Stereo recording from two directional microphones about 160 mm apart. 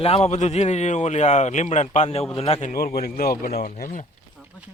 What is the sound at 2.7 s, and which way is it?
Speech, 70° left (ahead or behind).